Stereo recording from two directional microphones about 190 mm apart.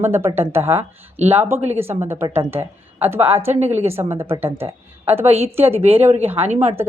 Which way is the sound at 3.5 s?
35° right (ahead or behind).